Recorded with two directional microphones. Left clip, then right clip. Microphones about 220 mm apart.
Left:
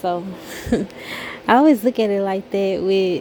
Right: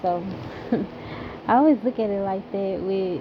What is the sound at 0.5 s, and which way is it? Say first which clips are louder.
Speech: left 5 dB; 60° left (ahead or behind).